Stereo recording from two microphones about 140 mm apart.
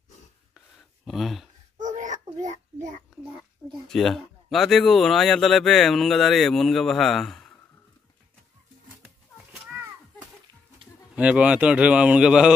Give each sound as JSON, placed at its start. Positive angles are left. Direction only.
{"t": 1.0, "sound": "speech", "side_deg": 0}
{"t": 1.8, "sound": "child singing", "side_deg": -65}
{"t": 3.9, "sound": "speech", "side_deg": 5}
{"t": 11.1, "sound": "speech", "side_deg": -10}